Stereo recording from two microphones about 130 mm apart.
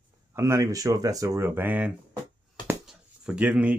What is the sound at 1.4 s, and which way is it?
Speech, 15° right (ahead or behind).